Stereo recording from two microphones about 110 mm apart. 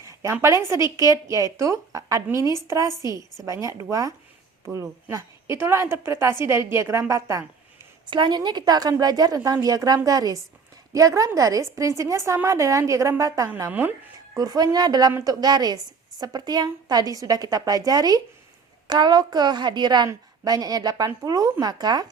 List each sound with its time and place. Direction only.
0.0 s a woman's voice: 25° right (ahead or behind)
8.0 s a woman's voice: 45° right (ahead or behind); by 13.5 s 30° right (ahead or behind)
13.6 s a woman's voice: 20° right (ahead or behind)
14.3 s a woman's voice: 35° right (ahead or behind)